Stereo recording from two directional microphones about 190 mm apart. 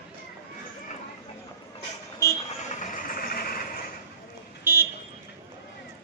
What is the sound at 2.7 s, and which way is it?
Vehicle, 45° left (ahead or behind).